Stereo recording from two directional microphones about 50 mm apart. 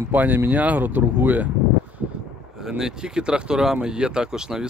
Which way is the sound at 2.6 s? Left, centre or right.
Centre.